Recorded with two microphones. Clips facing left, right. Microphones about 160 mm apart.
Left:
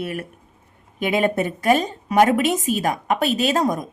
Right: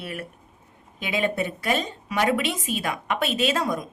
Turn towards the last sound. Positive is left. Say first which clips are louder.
# left 4 dB
turn(degrees=45)  # may be behind; listen again after turning